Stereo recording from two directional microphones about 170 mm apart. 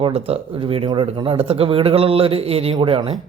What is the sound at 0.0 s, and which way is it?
A man's voice, 35° right (ahead or behind).